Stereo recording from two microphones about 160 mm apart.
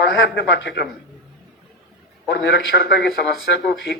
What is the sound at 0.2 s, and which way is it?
Speech, 90° left.